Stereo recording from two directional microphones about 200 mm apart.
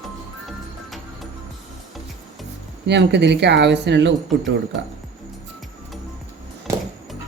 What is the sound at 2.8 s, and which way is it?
Speech, 60° right (ahead or behind).